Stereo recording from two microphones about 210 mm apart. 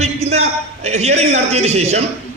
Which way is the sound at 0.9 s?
30° right (ahead or behind).